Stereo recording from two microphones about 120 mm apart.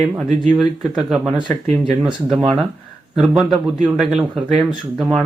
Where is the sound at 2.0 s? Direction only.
Centre (ahead or behind).